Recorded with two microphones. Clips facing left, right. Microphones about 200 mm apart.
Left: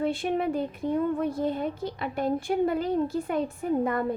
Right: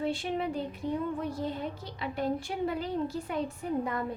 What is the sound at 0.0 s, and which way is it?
A woman's voice, 55° left (ahead or behind).